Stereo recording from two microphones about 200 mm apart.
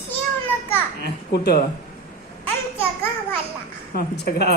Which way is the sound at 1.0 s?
50° left (ahead or behind).